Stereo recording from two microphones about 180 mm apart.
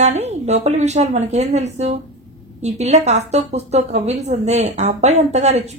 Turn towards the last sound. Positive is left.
turn(degrees=-40)  # may be behind; listen again after turning